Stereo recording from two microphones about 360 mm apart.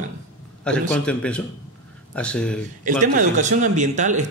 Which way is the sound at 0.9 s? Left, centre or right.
Centre.